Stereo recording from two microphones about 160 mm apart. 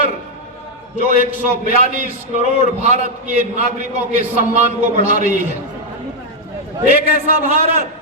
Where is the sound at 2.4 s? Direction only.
45° right (ahead or behind).